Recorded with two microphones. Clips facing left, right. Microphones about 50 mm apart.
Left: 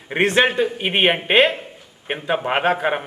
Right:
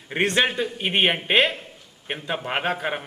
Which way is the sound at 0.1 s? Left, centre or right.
Centre.